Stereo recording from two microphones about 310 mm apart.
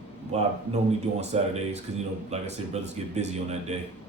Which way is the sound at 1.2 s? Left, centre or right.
Right.